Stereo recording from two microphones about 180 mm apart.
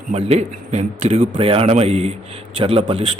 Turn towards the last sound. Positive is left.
turn(degrees=-35)  # may be behind; listen again after turning